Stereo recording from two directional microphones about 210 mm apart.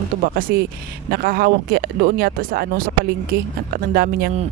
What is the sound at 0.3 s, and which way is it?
Speech, 45° right (ahead or behind).